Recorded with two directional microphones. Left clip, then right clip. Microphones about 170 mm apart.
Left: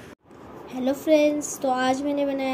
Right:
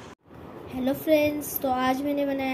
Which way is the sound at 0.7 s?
25° left (ahead or behind).